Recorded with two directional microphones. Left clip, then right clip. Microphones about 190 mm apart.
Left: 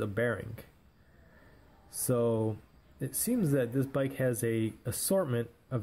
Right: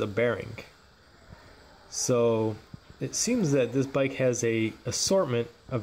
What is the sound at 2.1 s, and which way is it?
Speech, centre (ahead or behind).